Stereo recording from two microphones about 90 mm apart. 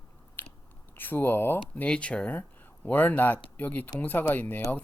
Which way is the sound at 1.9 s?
10° left (ahead or behind).